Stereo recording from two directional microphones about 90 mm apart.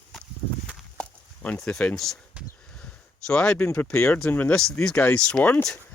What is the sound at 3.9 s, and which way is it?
Speech, 25° left (ahead or behind).